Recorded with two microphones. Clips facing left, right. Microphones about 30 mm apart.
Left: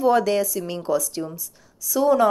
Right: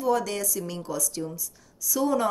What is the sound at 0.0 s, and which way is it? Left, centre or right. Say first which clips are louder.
A woman's voice: left 7 dB; left.